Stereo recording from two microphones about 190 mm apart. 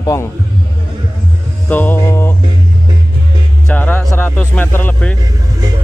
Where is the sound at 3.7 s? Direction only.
10° left (ahead or behind).